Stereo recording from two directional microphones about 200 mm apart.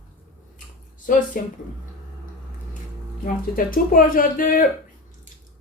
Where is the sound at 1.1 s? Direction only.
40° left (ahead or behind).